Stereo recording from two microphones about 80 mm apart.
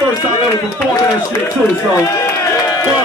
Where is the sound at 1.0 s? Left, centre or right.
Left.